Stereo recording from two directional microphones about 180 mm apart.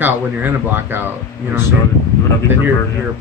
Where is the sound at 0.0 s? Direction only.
10° right (ahead or behind).